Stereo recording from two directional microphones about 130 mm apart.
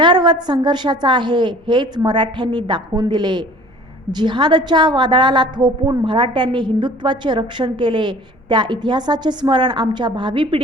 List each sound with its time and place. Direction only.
0.0 s a woman's voice: 35° right (ahead or behind)